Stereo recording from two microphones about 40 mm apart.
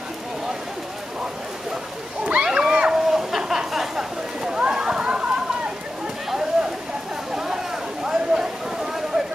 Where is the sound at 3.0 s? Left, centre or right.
Centre; by 5.7 s right.